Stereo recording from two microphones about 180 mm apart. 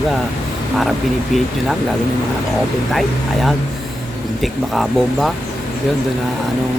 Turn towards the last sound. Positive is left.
turn(degrees=0)  # may be behind; listen again after turning